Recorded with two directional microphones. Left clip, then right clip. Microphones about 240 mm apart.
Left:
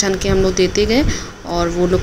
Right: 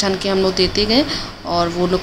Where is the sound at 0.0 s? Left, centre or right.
Centre.